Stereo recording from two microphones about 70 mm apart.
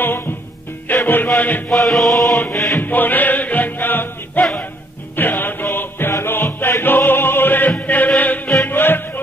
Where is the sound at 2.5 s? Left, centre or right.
Left.